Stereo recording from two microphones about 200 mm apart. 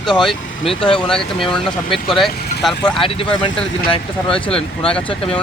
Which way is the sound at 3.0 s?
25° left (ahead or behind).